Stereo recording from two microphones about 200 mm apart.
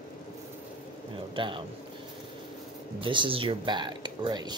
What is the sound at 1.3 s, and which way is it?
Speech, 25° right (ahead or behind).